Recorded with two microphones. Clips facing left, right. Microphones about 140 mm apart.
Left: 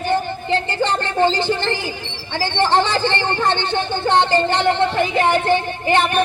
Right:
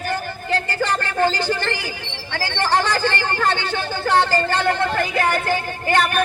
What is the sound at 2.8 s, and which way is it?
A man's voice, 20° left (ahead or behind).